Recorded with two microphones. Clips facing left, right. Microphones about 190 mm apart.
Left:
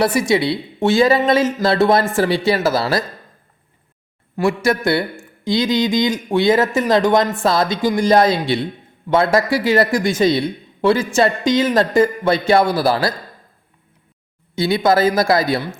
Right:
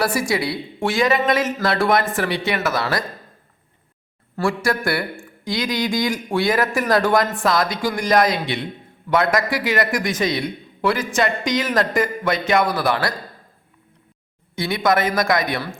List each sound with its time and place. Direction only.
0.0 s speech: 20° left (ahead or behind)
4.4 s speech: 20° left (ahead or behind)
14.5 s speech: 25° left (ahead or behind)